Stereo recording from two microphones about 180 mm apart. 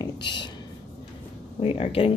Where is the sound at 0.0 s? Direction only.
25° left (ahead or behind).